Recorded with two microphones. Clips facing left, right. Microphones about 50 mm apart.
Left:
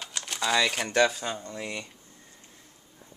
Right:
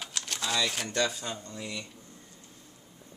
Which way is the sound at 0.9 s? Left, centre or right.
Left.